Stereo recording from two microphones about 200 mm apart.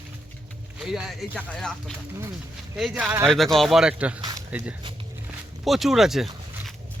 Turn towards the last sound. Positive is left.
turn(degrees=0)  # may be behind; listen again after turning